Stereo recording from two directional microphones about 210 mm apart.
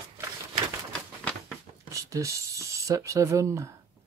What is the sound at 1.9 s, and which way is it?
Speech, 15° right (ahead or behind).